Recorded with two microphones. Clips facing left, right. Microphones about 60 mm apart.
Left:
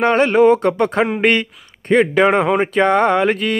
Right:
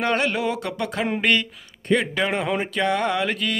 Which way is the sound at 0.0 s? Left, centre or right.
Left.